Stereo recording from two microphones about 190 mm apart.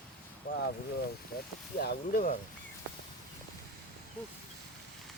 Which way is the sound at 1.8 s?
50° left (ahead or behind).